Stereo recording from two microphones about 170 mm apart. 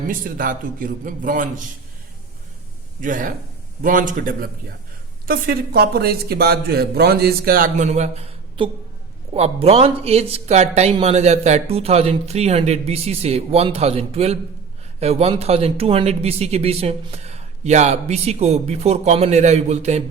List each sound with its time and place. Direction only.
0.1 s a man's voice: 55° right (ahead or behind)
3.0 s a man's voice: 50° right (ahead or behind)